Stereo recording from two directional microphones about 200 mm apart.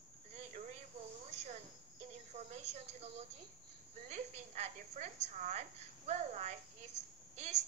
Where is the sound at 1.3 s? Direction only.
35° right (ahead or behind).